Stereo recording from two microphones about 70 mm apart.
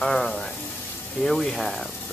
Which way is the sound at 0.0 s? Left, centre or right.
Centre.